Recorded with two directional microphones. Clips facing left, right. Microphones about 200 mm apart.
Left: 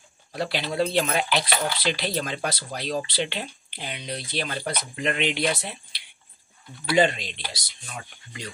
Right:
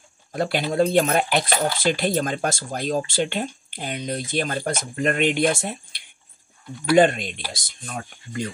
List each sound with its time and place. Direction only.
0.3 s speech: 50° right (ahead or behind)